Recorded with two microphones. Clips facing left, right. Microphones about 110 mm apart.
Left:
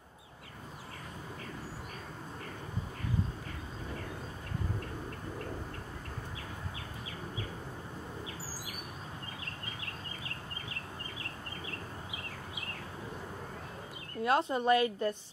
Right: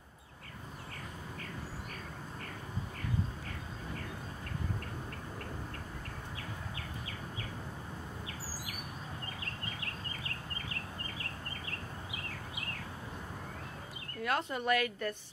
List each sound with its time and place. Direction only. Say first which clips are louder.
14.2 s a woman's voice: left 5 dB; 25° left (ahead or behind)